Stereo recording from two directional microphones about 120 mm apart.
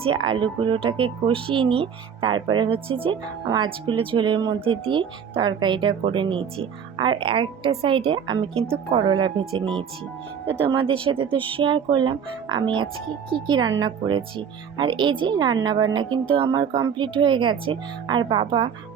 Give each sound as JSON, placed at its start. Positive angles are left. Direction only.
{"t": 0.0, "sound": "speech", "side_deg": -45}